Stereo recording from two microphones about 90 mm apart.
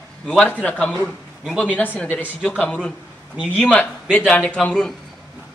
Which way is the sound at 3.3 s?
10° right (ahead or behind).